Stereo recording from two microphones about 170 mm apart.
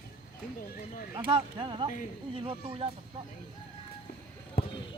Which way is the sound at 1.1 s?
30° right (ahead or behind).